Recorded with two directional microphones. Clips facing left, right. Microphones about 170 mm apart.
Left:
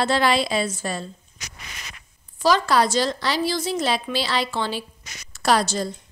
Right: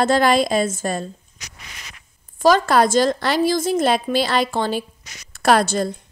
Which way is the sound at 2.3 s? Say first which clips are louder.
Right 4 dB; 50° right (ahead or behind).